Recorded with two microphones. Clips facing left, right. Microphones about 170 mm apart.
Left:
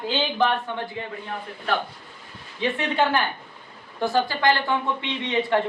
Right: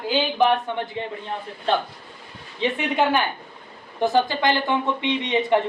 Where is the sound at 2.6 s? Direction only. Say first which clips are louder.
Right 1 dB; 15° right (ahead or behind).